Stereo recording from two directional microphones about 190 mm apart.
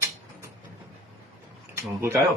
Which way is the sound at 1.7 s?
15° right (ahead or behind).